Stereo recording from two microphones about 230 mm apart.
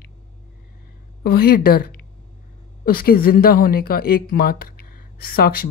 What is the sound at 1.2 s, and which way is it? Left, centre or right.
Speech, left.